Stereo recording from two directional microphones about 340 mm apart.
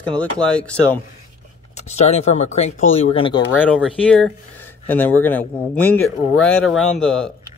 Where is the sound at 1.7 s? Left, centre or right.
Centre.